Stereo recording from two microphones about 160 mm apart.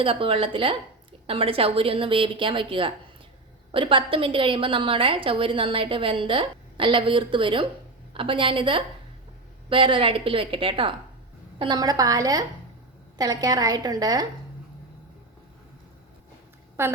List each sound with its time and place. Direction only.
0.0 s a woman's voice: 35° right (ahead or behind)
16.8 s a woman's voice: 15° right (ahead or behind)